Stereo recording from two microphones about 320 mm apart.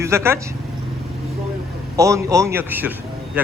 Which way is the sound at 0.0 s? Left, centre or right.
Centre.